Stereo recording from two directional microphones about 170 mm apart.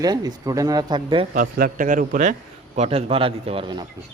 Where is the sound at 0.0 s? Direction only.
20° right (ahead or behind).